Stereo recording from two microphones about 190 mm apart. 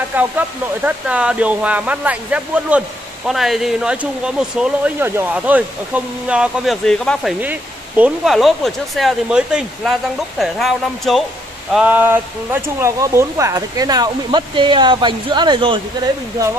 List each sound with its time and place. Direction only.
0.1 s speech: 10° right (ahead or behind); by 15.8 s 25° right (ahead or behind)